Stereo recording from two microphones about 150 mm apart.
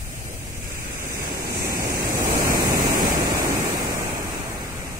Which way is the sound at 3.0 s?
25° right (ahead or behind).